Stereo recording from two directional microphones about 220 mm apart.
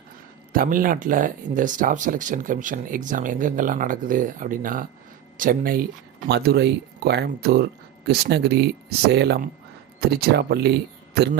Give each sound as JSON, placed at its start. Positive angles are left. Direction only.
{"t": 0.5, "sound": "speech", "side_deg": -40}